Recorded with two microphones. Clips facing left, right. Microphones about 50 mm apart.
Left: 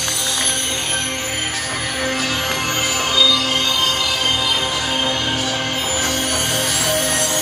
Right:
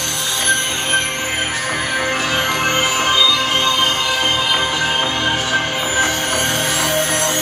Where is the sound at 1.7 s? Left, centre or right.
Right.